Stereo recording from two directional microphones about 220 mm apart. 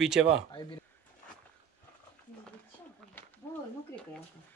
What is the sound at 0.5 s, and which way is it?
Speech, 20° left (ahead or behind).